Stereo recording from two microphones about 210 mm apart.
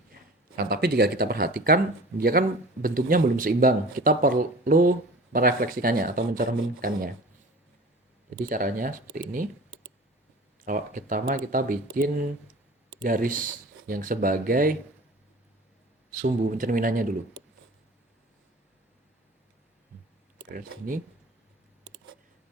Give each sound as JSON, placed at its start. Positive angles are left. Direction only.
{"t": 0.5, "sound": "speech", "side_deg": -45}
{"t": 8.3, "sound": "speech", "side_deg": -40}
{"t": 10.6, "sound": "speech", "side_deg": -40}
{"t": 16.1, "sound": "speech", "side_deg": -40}